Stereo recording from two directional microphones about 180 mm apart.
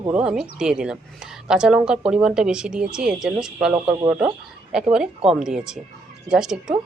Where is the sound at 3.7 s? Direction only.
25° right (ahead or behind).